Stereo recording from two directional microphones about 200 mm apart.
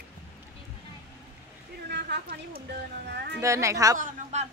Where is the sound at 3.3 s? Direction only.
15° right (ahead or behind).